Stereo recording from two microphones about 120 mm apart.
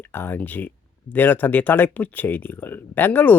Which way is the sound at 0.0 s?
20° left (ahead or behind).